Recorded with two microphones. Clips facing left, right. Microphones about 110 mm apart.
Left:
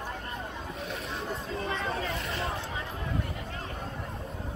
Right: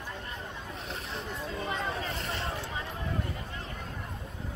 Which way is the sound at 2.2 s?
30° right (ahead or behind).